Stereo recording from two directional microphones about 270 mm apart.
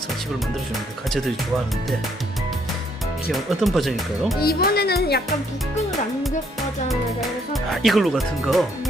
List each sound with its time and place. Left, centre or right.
3.3 s speech: centre
4.4 s speech: left
6.8 s speech: centre